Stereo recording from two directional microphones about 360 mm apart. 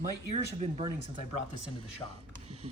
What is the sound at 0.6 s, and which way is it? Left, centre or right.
Speech, centre.